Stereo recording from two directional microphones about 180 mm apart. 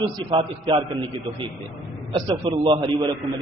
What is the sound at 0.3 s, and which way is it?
Speech, 25° right (ahead or behind).